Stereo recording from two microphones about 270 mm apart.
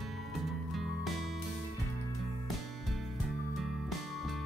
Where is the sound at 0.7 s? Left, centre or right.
Centre.